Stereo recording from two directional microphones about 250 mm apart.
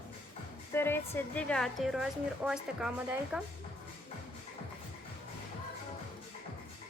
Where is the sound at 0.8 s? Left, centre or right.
Centre.